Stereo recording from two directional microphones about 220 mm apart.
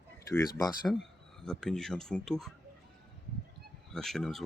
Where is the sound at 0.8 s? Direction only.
Centre (ahead or behind).